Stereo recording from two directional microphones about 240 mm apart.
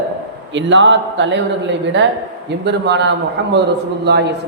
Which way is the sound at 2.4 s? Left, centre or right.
Right.